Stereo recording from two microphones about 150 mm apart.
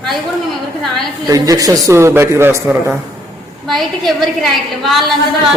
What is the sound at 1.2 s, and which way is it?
A man's voice, 20° right (ahead or behind).